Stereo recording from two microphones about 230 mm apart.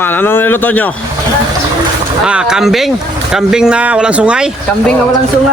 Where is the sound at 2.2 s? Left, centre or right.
Centre.